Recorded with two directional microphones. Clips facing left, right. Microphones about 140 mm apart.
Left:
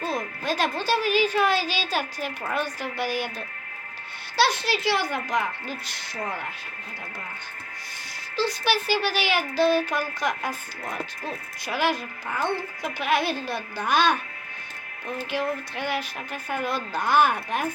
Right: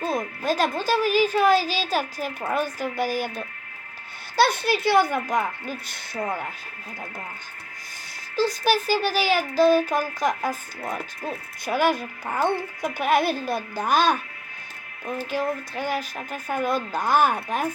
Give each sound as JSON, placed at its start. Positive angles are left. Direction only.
{"t": 0.0, "sound": "hoot", "side_deg": -45}
{"t": 8.4, "sound": "hoot", "side_deg": -45}
{"t": 15.3, "sound": "hoot", "side_deg": -40}
{"t": 17.3, "sound": "speech", "side_deg": -40}